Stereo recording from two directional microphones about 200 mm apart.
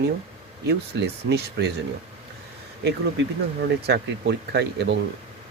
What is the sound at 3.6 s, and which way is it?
Speech, 55° right (ahead or behind).